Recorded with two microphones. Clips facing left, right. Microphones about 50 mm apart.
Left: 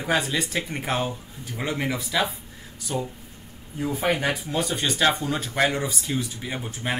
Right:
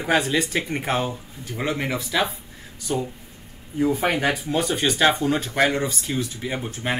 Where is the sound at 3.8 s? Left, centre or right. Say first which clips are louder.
Right 3 dB; centre.